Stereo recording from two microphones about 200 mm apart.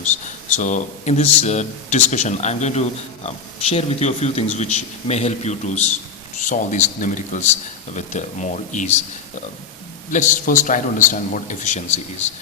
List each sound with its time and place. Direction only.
0.5 s speech: 40° left (ahead or behind)
10.1 s speech: 40° left (ahead or behind)